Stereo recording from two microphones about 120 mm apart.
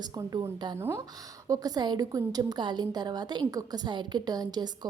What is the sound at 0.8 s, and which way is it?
Speech, 20° right (ahead or behind).